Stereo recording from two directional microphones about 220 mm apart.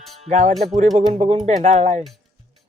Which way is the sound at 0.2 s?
30° right (ahead or behind).